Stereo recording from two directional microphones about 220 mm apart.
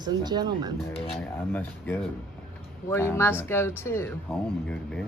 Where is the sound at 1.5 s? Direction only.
10° left (ahead or behind).